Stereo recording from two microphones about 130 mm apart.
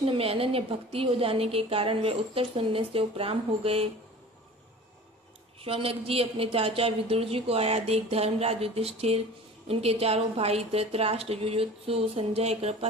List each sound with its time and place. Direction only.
0.0 s a woman's voice: 45° right (ahead or behind)
5.6 s a woman's voice: 45° right (ahead or behind)